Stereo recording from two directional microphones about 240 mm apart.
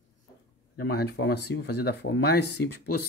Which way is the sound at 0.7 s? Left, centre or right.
Left.